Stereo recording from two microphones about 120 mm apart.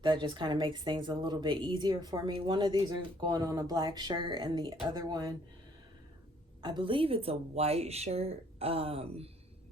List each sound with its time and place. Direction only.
0.0 s speech: 40° right (ahead or behind)
6.6 s speech: 40° right (ahead or behind)